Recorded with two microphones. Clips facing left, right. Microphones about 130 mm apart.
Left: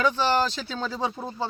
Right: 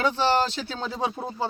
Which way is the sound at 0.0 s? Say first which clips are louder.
Even; 25° right (ahead or behind).